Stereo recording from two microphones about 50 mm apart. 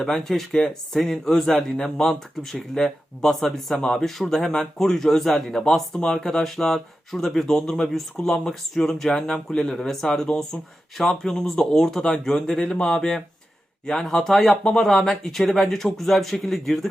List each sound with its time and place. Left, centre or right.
0.0 s speech: centre
10.2 s speech: left
10.9 s speech: centre